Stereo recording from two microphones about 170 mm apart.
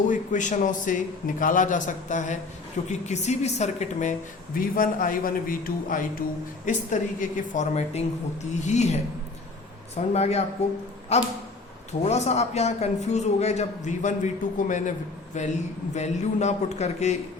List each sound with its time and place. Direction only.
0.1 s a woman's voice: 45° left (ahead or behind)
4.7 s a man's voice: 55° left (ahead or behind)